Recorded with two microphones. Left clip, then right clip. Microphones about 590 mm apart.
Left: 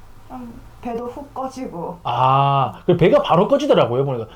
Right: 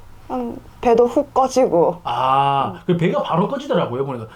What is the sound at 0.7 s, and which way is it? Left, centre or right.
Speech, right.